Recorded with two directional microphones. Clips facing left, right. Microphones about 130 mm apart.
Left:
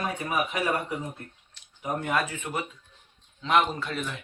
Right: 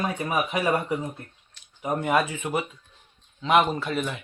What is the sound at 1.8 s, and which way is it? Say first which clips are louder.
Speech: right 4 dB; 15° right (ahead or behind).